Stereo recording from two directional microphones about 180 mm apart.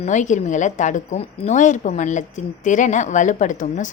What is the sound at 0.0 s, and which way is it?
A woman's voice, 40° left (ahead or behind).